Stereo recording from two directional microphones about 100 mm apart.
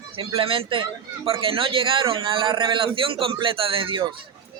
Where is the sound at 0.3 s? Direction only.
60° right (ahead or behind).